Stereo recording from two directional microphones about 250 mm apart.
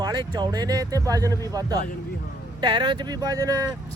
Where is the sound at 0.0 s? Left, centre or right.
Centre.